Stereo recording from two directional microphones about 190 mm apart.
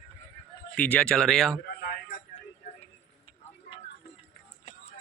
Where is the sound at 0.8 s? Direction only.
5° left (ahead or behind).